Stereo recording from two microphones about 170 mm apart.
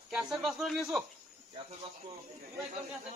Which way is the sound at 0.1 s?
Centre (ahead or behind).